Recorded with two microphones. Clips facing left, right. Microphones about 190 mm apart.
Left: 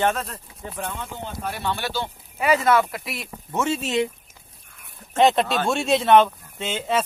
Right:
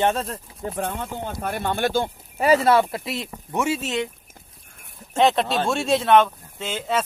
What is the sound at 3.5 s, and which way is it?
Speech, 10° right (ahead or behind).